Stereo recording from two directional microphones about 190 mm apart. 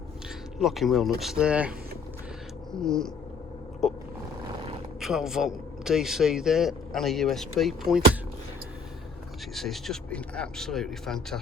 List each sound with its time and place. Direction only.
0.6 s a man's voice: centre (ahead or behind)
2.7 s a man's voice: 5° left (ahead or behind)
9.6 s a man's voice: centre (ahead or behind)